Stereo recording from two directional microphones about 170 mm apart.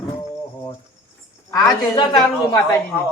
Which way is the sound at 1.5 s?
20° left (ahead or behind).